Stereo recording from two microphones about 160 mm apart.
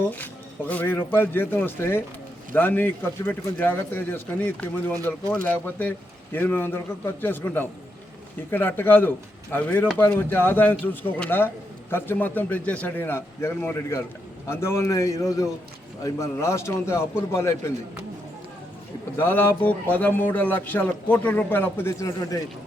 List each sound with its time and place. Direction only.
0.7 s a man's voice: 10° left (ahead or behind)
19.2 s a man's voice: 15° left (ahead or behind)